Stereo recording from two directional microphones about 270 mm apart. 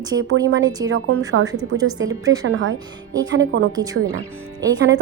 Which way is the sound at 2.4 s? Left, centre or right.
Right.